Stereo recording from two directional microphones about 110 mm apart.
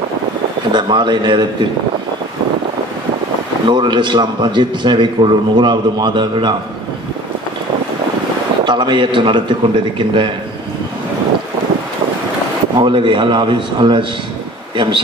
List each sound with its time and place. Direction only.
0.7 s a man's voice: 45° right (ahead or behind)
3.6 s a man's voice: 45° right (ahead or behind)
8.6 s a man's voice: 45° right (ahead or behind)
12.7 s a man's voice: 50° right (ahead or behind)